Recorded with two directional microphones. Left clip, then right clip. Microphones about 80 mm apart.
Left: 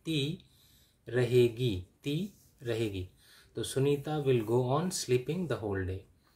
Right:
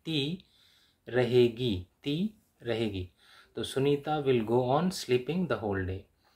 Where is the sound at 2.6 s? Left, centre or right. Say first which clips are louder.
Right 2 dB; left.